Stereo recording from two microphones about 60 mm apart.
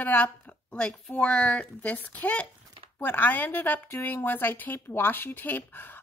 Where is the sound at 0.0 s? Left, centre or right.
Left.